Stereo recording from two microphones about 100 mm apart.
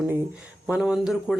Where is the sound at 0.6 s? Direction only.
10° right (ahead or behind).